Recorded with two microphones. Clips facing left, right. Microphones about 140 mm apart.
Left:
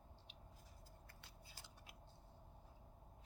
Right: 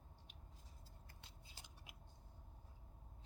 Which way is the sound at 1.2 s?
20° right (ahead or behind).